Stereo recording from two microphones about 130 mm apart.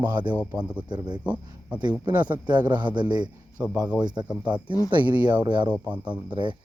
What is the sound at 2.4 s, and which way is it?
Speech, 35° right (ahead or behind).